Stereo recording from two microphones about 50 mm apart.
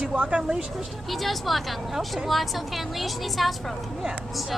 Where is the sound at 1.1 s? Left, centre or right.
Centre.